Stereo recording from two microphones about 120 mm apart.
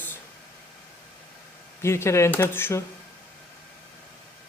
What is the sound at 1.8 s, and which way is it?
Speech, 20° left (ahead or behind).